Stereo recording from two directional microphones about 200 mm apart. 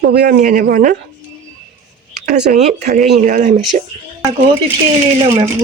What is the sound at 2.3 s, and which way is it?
Speech, 55° right (ahead or behind).